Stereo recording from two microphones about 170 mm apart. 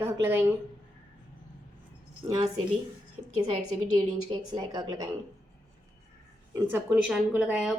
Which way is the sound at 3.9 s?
25° right (ahead or behind).